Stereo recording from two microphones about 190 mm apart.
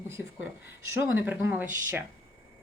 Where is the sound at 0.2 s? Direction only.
5° right (ahead or behind).